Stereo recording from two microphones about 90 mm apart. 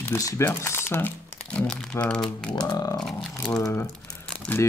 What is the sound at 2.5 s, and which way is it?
Speech, 45° left (ahead or behind).